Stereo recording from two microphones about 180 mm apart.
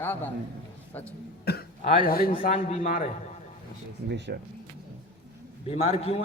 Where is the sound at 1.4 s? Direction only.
60° left (ahead or behind).